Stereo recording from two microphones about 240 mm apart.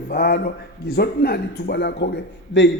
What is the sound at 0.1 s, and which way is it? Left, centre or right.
A man's voice, left.